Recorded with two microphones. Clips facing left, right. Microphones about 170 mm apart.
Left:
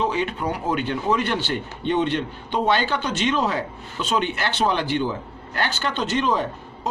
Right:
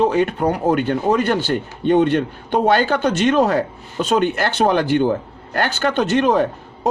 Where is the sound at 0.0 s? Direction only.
50° right (ahead or behind).